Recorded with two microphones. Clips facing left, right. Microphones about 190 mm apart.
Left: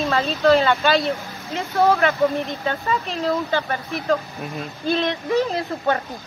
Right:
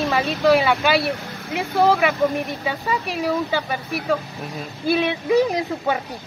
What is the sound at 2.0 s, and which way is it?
Speech, 10° right (ahead or behind).